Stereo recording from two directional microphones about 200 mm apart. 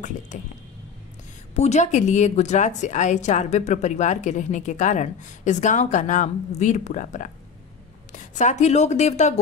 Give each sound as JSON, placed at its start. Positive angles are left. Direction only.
{"t": 0.3, "sound": "a woman's voice", "side_deg": 40}
{"t": 1.5, "sound": "a woman's voice", "side_deg": 35}